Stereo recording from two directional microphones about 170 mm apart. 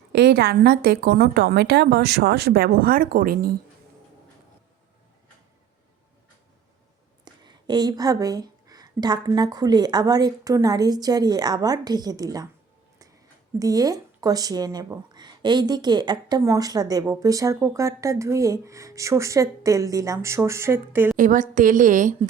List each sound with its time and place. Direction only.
0.1 s a woman's voice: 80° right; by 3.6 s 60° right (ahead or behind)
7.3 s speech: 25° right (ahead or behind)
13.6 s speech: 20° right (ahead or behind)
21.2 s a woman's voice: 50° right (ahead or behind)